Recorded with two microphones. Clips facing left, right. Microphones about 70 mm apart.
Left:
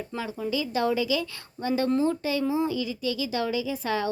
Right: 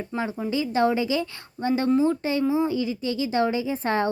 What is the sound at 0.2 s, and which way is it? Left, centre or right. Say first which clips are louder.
Speech: right 3 dB; right.